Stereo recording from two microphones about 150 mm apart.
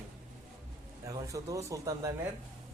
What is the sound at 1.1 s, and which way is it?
A man's voice, 20° right (ahead or behind).